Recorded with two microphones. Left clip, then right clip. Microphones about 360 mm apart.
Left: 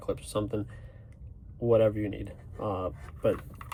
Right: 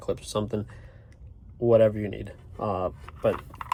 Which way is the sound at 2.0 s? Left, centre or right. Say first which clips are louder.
Right 1 dB; right.